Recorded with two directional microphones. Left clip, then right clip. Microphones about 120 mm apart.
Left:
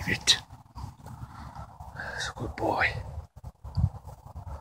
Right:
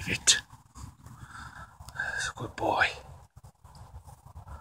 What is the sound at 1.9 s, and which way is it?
Whispering, 10° left (ahead or behind).